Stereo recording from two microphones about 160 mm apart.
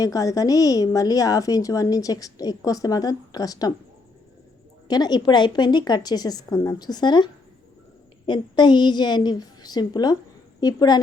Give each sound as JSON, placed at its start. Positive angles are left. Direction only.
{"t": 0.0, "sound": "a woman's voice", "side_deg": 20}
{"t": 4.9, "sound": "a woman's voice", "side_deg": 25}
{"t": 8.3, "sound": "a woman's voice", "side_deg": 30}